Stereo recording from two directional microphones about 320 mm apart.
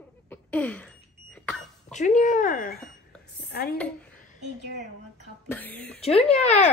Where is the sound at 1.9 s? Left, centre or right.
Left.